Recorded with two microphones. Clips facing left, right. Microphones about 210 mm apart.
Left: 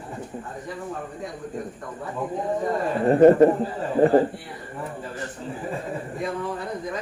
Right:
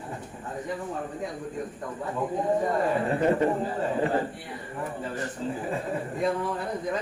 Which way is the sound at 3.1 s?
45° left (ahead or behind).